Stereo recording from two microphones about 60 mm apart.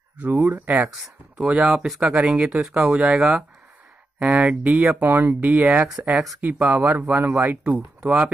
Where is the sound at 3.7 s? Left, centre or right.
Right.